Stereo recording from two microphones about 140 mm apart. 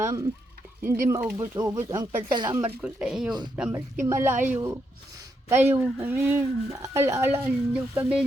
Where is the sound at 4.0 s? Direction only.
20° right (ahead or behind).